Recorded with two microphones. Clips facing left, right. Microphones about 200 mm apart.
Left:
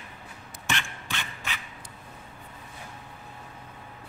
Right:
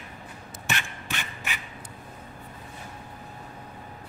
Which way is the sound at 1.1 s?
15° right (ahead or behind).